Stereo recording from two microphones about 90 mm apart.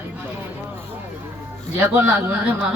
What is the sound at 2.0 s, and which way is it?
Speech, 20° right (ahead or behind).